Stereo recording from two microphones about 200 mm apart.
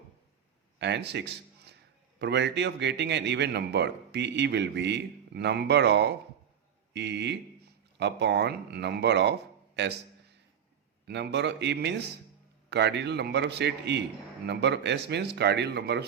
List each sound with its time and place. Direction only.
0.8 s a man's voice: 60° right (ahead or behind)
11.0 s a man's voice: 60° right (ahead or behind)